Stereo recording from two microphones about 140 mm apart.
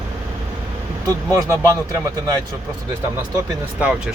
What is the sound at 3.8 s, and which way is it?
Speech, 10° right (ahead or behind).